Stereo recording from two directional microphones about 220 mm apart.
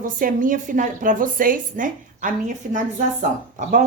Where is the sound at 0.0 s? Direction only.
35° right (ahead or behind).